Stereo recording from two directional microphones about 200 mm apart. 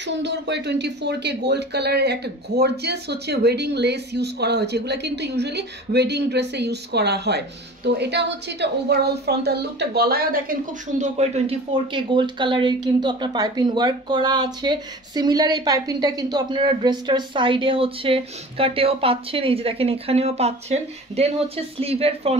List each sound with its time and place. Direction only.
0.0 s speech: 60° right (ahead or behind); by 22.4 s 30° right (ahead or behind)